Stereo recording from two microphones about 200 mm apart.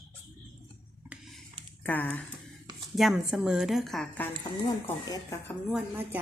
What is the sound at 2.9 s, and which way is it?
A woman's voice, centre (ahead or behind).